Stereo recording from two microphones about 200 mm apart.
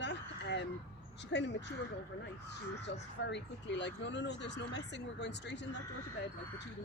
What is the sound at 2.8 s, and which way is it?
Speech, 60° left (ahead or behind).